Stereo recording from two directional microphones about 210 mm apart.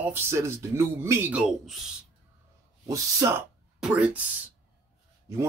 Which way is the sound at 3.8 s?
5° right (ahead or behind).